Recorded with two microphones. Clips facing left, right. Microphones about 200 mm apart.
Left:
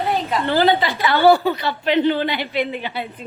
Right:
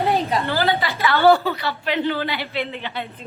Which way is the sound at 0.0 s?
15° right (ahead or behind).